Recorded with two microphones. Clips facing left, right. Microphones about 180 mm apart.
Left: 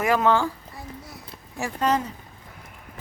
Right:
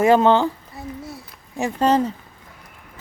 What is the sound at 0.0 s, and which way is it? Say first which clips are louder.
Speech: right 6 dB; 25° right (ahead or behind).